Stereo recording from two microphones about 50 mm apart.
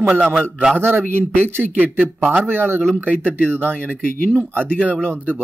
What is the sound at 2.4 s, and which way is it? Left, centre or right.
Speech, right.